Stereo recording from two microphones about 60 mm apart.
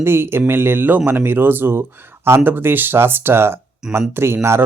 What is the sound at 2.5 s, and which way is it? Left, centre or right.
Speech, right.